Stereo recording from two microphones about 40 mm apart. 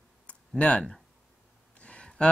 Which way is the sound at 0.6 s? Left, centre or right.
Left.